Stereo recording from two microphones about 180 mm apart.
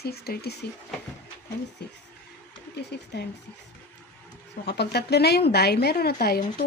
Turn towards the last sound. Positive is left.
turn(degrees=55)  # may be behind; listen again after turning